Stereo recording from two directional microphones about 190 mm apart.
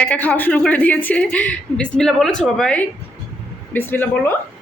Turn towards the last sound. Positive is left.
turn(degrees=10)  # may be behind; listen again after turning